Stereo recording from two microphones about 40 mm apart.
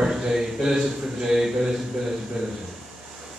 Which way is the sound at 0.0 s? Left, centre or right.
Centre.